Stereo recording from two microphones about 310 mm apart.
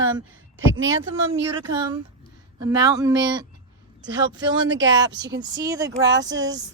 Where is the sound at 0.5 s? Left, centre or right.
Right.